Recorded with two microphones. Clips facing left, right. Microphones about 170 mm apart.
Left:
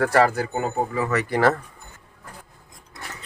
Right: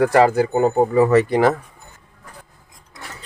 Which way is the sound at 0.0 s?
20° right (ahead or behind).